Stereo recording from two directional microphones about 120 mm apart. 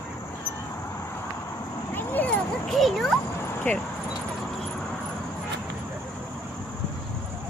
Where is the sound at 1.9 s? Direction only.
15° left (ahead or behind).